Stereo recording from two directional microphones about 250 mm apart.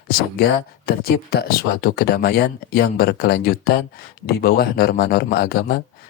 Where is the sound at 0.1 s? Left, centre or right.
Left.